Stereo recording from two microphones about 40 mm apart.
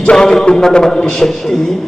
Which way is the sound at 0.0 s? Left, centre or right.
Centre.